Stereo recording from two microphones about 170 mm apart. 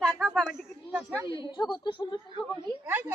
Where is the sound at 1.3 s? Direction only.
30° left (ahead or behind).